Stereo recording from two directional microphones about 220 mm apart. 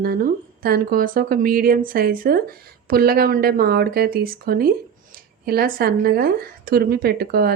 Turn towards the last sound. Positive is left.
turn(degrees=-45)  # may be behind; listen again after turning